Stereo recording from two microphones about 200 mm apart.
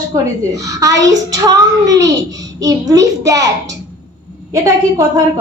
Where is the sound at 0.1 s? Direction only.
15° right (ahead or behind).